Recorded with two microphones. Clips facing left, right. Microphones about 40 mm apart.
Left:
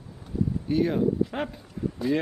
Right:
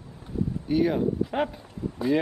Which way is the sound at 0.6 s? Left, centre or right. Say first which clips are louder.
Right 1 dB; centre.